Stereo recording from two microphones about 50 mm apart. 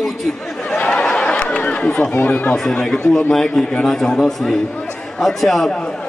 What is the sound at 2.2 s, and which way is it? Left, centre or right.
Speech, left.